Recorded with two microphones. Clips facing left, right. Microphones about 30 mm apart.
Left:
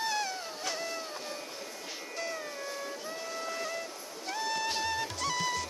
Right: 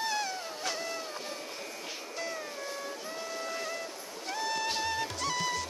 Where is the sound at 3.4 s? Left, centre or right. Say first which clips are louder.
Left 1 dB; centre.